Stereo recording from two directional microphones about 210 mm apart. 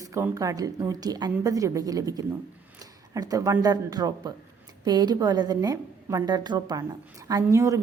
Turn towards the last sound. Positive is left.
turn(degrees=-15)  # may be behind; listen again after turning